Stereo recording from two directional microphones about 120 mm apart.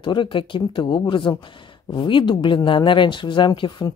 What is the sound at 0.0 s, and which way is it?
Speech, 40° left (ahead or behind).